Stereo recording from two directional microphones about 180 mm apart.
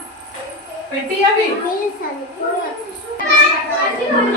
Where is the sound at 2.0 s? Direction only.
50° left (ahead or behind).